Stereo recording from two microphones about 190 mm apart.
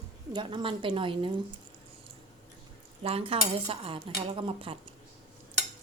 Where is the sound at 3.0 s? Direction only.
30° right (ahead or behind).